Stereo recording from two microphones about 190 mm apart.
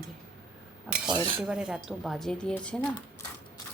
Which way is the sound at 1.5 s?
5° right (ahead or behind).